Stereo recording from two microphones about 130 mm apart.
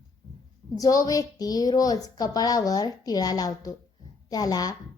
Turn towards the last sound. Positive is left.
turn(degrees=30)  # may be behind; listen again after turning